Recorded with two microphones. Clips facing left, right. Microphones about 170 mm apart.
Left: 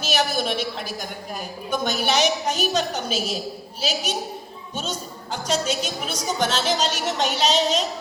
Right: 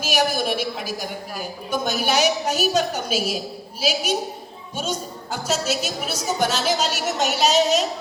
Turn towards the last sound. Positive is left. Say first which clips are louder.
# right 3 dB
turn(degrees=-10)  # may be behind; listen again after turning